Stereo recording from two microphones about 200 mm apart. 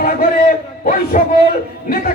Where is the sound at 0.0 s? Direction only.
45° left (ahead or behind).